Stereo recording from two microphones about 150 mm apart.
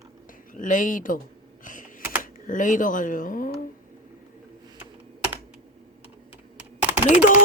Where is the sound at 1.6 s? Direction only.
60° left (ahead or behind).